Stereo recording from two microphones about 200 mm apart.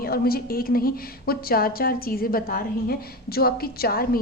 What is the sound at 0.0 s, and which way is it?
A woman's voice, 50° left (ahead or behind).